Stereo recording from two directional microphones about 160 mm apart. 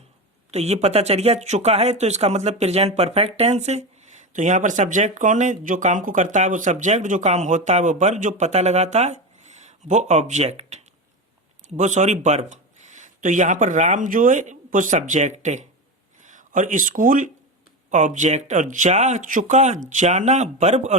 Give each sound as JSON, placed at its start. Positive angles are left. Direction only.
{"t": 0.5, "sound": "speech", "side_deg": -40}
{"t": 11.8, "sound": "speech", "side_deg": -50}